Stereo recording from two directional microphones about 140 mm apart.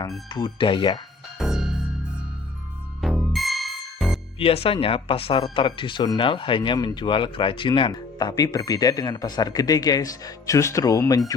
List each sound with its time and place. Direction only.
0.3 s speech: 30° left (ahead or behind)
1.4 s music: 5° right (ahead or behind)
3.0 s music: centre (ahead or behind)
4.4 s speech: 45° left (ahead or behind); by 11.2 s 25° left (ahead or behind)